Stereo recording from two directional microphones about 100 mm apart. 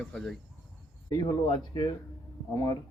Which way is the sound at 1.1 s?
45° left (ahead or behind).